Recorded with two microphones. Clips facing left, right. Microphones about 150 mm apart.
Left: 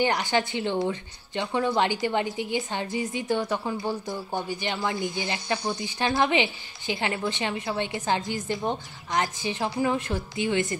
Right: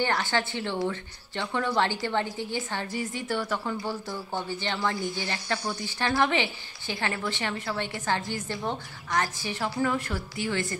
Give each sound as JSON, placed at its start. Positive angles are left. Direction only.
{"t": 0.0, "sound": "speech", "side_deg": 15}